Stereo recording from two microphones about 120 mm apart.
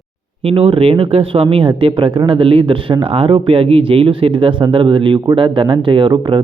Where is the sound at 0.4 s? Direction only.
50° right (ahead or behind).